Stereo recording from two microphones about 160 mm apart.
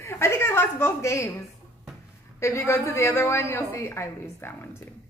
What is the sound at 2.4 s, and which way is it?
A woman's voice, 20° left (ahead or behind).